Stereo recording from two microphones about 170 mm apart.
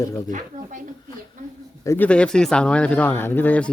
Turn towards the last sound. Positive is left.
turn(degrees=10)  # may be behind; listen again after turning